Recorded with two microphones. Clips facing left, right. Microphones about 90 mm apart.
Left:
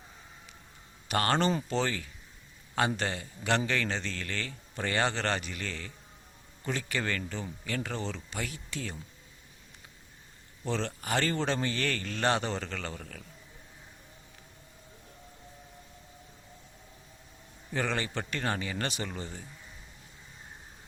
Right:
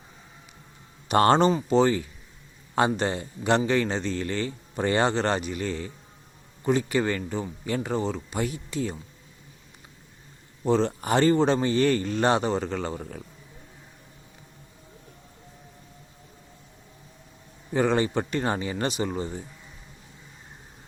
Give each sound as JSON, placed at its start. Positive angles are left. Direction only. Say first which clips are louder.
{"t": 1.0, "sound": "speech", "louder": "right 9 dB", "side_deg": -25}
{"t": 1.5, "sound": "a man's voice", "louder": "right 9 dB", "side_deg": -15}
{"t": 10.7, "sound": "a man's voice", "louder": "right 9 dB", "side_deg": -15}
{"t": 17.7, "sound": "a man's voice", "louder": "right 9 dB", "side_deg": -20}